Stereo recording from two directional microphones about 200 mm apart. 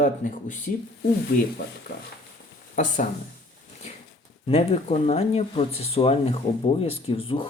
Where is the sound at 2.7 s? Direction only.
40° left (ahead or behind).